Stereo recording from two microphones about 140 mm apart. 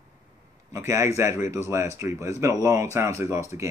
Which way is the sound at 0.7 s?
20° right (ahead or behind).